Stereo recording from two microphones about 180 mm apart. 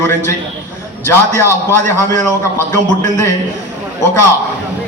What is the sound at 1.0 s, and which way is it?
A man's voice, 15° left (ahead or behind).